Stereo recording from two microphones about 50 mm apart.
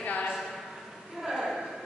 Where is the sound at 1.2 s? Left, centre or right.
Centre.